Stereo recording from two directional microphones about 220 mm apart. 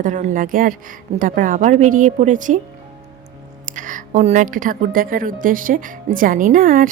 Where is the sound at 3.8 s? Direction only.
35° right (ahead or behind).